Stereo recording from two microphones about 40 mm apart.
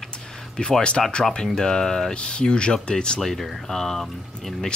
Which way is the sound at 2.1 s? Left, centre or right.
Left.